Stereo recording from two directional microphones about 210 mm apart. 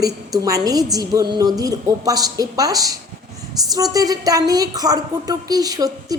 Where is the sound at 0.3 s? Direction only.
15° right (ahead or behind).